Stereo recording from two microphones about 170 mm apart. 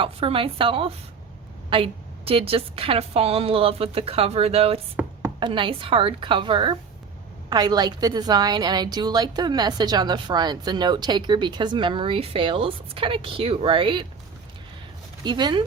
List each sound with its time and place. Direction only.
0.0 s a woman's voice: 30° right (ahead or behind)
5.0 s chopping: 15° right (ahead or behind)
5.4 s a woman's voice: 30° right (ahead or behind)
15.2 s a woman's voice: 25° right (ahead or behind)